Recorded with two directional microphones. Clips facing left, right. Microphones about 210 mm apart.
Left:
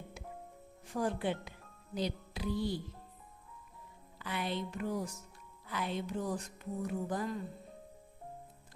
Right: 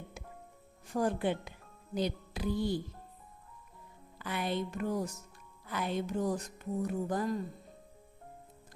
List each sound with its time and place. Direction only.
0.9 s speech: 50° right (ahead or behind)
4.2 s speech: 50° right (ahead or behind)